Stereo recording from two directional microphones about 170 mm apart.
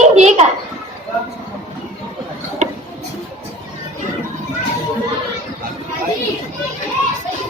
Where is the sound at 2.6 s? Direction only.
40° right (ahead or behind).